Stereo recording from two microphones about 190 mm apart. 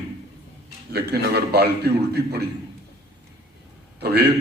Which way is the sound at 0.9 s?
55° right (ahead or behind).